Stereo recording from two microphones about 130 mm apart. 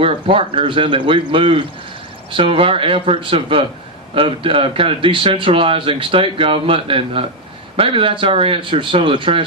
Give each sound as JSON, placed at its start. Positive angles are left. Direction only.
{"t": 0.0, "sound": "speech", "side_deg": -45}